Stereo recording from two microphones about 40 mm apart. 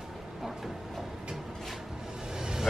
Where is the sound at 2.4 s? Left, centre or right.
Centre.